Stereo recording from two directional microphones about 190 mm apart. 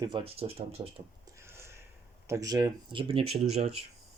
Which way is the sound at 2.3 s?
20° right (ahead or behind).